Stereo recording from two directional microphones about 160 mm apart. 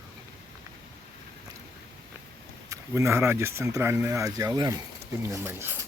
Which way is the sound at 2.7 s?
15° right (ahead or behind).